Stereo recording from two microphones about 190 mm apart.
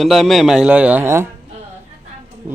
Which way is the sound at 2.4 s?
10° right (ahead or behind).